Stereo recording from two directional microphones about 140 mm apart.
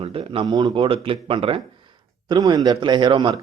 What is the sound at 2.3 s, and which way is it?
A man's voice, 30° right (ahead or behind).